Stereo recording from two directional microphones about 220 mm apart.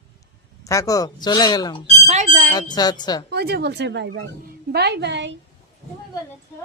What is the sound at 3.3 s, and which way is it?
Speech, 45° right (ahead or behind).